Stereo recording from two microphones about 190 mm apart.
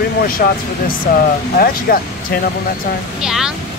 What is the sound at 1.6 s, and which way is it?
Speech, 55° left (ahead or behind).